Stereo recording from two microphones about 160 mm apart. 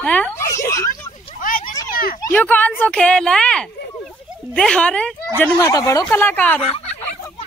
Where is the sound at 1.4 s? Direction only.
60° left (ahead or behind).